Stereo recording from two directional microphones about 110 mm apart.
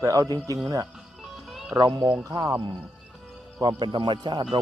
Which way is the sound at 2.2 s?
30° right (ahead or behind).